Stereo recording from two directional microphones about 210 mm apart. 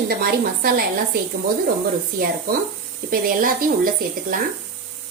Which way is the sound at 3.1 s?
40° right (ahead or behind).